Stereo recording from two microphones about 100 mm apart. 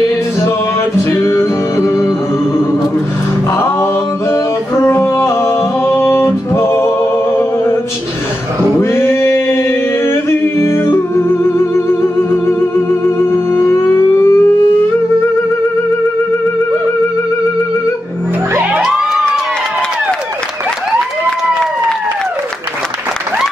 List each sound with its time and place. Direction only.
1.1 s music: 25° left (ahead or behind)
3.5 s singing: 25° left (ahead or behind)
7.3 s music: 25° left (ahead or behind)
8.7 s singing: 25° left (ahead or behind)